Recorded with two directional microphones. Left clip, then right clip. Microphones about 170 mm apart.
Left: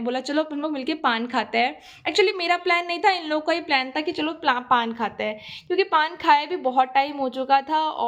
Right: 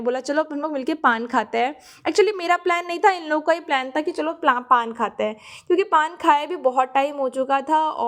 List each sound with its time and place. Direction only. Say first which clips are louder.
0.0 s a woman's voice: right 3 dB; 35° right (ahead or behind); by 7.5 s 20° right (ahead or behind)
7.5 s speech: left 1 dB; 30° right (ahead or behind)